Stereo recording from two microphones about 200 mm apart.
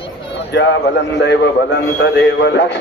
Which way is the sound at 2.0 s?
60° left (ahead or behind).